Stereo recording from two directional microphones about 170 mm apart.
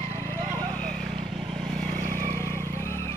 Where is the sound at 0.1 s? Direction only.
15° left (ahead or behind).